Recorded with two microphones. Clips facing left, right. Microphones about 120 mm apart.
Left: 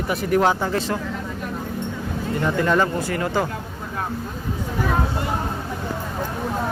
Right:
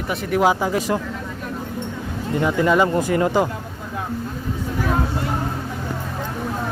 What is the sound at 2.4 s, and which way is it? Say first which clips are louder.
Speech: right 3 dB; 5° right (ahead or behind).